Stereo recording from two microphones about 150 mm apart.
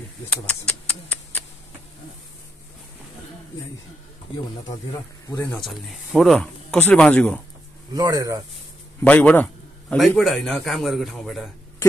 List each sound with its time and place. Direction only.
0.3 s speech: 10° left (ahead or behind)
4.6 s speech: 25° left (ahead or behind)
5.5 s a man's voice: centre (ahead or behind)
7.9 s speech: 25° right (ahead or behind)
9.0 s a man's voice: 10° left (ahead or behind)